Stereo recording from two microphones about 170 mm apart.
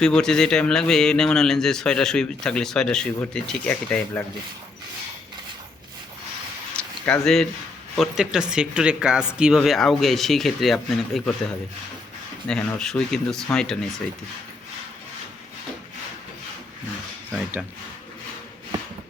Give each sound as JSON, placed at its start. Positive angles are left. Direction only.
{"t": 0.0, "sound": "a man's voice", "side_deg": 5}
{"t": 6.7, "sound": "a sound", "side_deg": 5}
{"t": 7.9, "sound": "a man's voice", "side_deg": 0}
{"t": 12.5, "sound": "a man's voice", "side_deg": 5}